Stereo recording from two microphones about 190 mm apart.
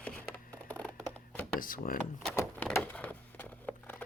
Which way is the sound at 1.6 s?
45° left (ahead or behind).